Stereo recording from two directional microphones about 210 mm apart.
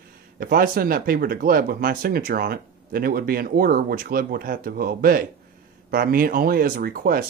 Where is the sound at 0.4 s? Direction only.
45° right (ahead or behind).